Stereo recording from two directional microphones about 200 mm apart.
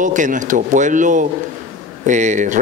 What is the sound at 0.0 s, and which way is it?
A man's voice, 40° right (ahead or behind).